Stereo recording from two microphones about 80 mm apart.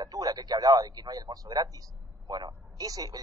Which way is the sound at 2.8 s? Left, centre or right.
Right.